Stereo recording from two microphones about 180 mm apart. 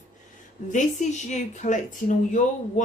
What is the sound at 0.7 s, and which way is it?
A woman's voice, 40° left (ahead or behind).